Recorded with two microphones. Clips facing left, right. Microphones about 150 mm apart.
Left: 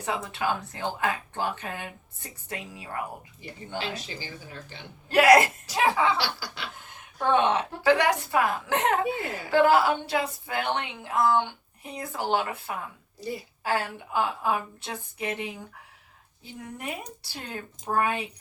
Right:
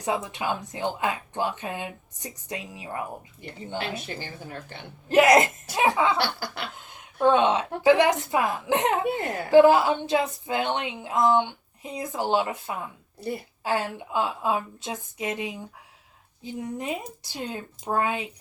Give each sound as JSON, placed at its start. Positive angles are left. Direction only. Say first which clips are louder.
{"t": 0.0, "sound": "speech", "louder": "right 1 dB", "side_deg": -15}
{"t": 3.8, "sound": "a woman's voice", "louder": "right 2 dB", "side_deg": -55}
{"t": 5.0, "sound": "a woman's voice", "louder": "even", "side_deg": -20}
{"t": 6.1, "sound": "chuckle", "louder": "right 3 dB", "side_deg": -55}
{"t": 6.7, "sound": "a woman's voice", "louder": "right 6 dB", "side_deg": -20}